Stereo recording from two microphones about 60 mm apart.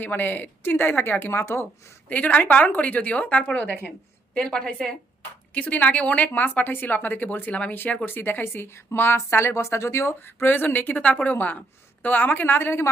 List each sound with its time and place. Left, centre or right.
0.0 s speech: left
2.0 s a woman's voice: left
4.4 s a woman's voice: centre
5.5 s a woman's voice: left
10.5 s a woman's voice: left